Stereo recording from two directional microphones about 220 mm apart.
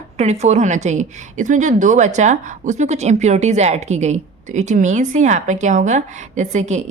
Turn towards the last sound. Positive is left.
turn(degrees=-30)  # may be behind; listen again after turning